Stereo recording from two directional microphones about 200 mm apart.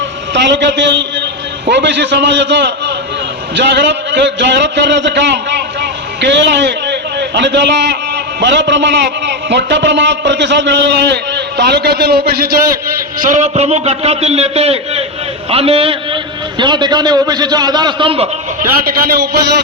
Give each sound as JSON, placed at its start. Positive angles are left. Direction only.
{"t": 0.3, "sound": "a man's voice", "side_deg": -60}
{"t": 18.9, "sound": "a man's voice", "side_deg": -50}